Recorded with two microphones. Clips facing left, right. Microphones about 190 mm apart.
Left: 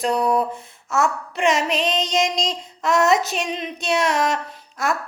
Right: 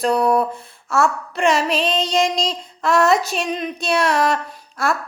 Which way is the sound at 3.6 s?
20° left (ahead or behind).